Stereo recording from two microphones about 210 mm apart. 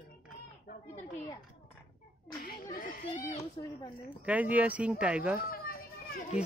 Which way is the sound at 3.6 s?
20° left (ahead or behind).